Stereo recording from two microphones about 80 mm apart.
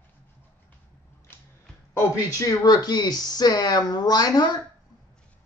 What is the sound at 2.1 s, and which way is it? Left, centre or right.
Speech, left.